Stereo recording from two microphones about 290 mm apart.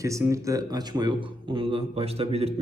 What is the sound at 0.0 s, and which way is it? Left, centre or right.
A man's voice, centre.